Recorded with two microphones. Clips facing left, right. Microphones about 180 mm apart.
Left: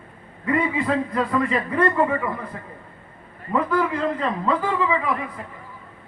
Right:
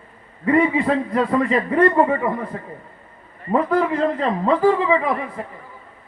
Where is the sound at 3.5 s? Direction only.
30° right (ahead or behind).